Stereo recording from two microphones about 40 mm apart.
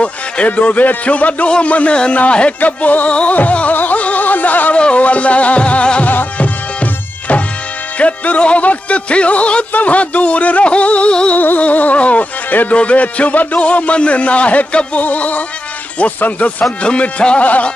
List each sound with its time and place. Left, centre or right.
0.0 s a man's voice: left
3.1 s a man's voice: left
3.7 s a sound: left
4.7 s music: left
9.7 s a man's voice: left
11.3 s music: left
12.7 s a man's voice: left
16.8 s a man's voice: left